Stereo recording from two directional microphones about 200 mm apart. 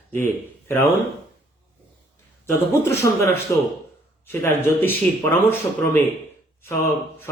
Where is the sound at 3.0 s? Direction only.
15° left (ahead or behind).